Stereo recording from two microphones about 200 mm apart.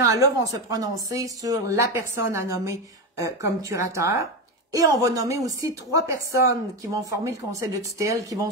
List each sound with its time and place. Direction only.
0.1 s speech: 15° right (ahead or behind)